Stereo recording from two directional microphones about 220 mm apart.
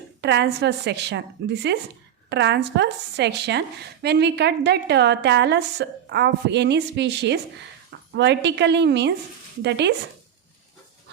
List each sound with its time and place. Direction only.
0.2 s a woman's voice: 50° right (ahead or behind)